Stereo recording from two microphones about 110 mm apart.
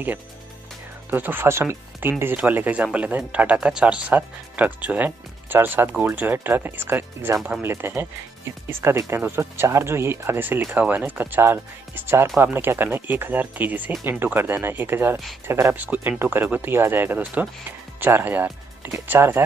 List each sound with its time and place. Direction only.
1.1 s speech: 20° right (ahead or behind)
15.7 s speech: 15° right (ahead or behind)